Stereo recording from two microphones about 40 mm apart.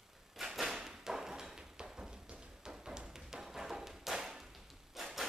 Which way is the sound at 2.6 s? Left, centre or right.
Centre.